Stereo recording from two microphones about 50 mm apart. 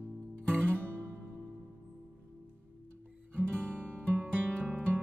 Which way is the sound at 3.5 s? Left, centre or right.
Left.